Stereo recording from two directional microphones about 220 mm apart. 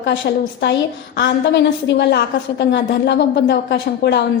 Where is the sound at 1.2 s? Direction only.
50° left (ahead or behind).